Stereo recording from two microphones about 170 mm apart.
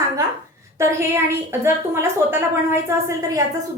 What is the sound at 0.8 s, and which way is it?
A woman's voice, 15° right (ahead or behind).